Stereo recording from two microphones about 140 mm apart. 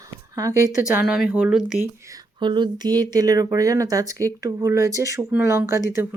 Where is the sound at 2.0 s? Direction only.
30° right (ahead or behind).